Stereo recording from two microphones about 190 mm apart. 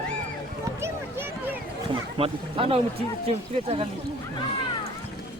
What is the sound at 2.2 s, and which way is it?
Speech, 30° right (ahead or behind).